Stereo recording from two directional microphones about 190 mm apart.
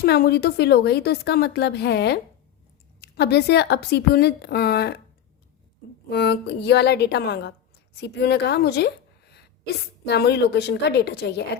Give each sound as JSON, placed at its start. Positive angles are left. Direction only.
{"t": 0.0, "sound": "a woman's voice", "side_deg": 55}
{"t": 6.1, "sound": "a woman's voice", "side_deg": 55}